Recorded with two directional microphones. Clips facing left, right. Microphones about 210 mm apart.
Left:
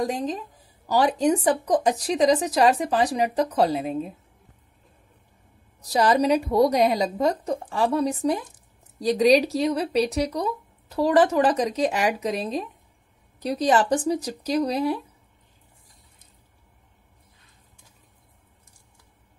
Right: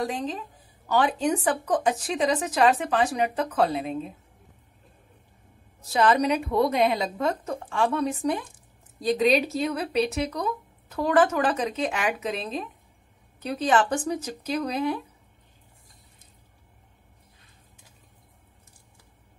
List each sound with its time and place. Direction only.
0.0 s a woman's voice: 40° left (ahead or behind)
5.9 s a woman's voice: 35° left (ahead or behind)